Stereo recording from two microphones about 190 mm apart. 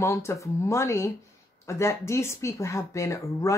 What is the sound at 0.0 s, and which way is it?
Speech, 15° left (ahead or behind).